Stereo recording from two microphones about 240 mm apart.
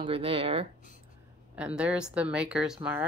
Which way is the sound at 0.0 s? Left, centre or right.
Right.